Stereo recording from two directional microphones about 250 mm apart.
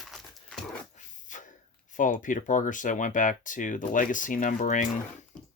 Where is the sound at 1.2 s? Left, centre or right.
Left.